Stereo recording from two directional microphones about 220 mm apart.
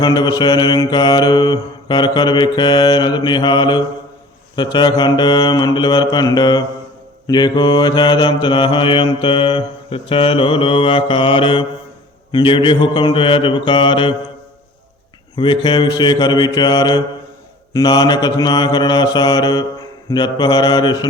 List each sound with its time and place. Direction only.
0.0 s mantra: 20° left (ahead or behind)
15.4 s mantra: 20° left (ahead or behind)